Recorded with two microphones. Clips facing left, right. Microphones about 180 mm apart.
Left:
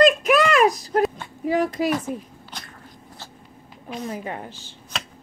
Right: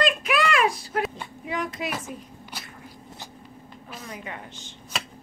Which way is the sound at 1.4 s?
35° left (ahead or behind).